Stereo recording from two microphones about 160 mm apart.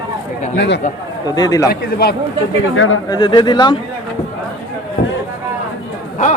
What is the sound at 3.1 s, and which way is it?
Speech, 30° left (ahead or behind).